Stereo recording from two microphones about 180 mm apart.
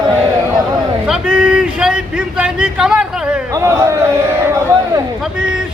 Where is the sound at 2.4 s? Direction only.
5° right (ahead or behind).